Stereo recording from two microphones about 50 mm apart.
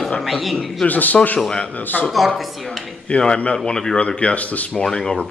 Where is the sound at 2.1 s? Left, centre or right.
Centre.